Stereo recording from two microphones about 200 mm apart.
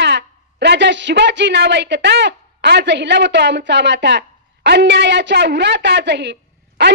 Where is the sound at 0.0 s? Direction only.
60° right (ahead or behind).